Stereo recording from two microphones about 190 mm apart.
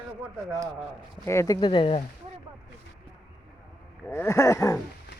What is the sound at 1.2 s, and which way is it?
Speech, 15° left (ahead or behind).